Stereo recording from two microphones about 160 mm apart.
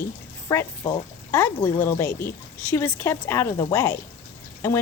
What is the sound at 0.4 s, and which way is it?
Speech, 15° left (ahead or behind).